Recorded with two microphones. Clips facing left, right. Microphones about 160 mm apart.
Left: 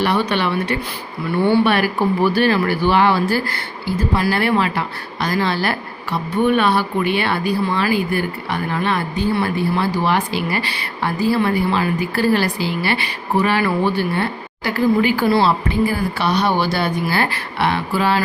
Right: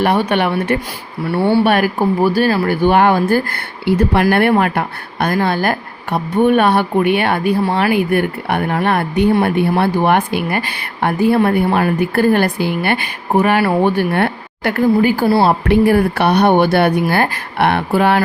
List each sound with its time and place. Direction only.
0.0 s speech: 50° right (ahead or behind)
1.2 s speech: 40° right (ahead or behind); by 14.8 s 60° right (ahead or behind)
14.9 s speech: 45° right (ahead or behind)
15.4 s speech: 70° right (ahead or behind)